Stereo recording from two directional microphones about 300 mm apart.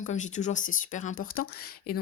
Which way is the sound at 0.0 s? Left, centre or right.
Left.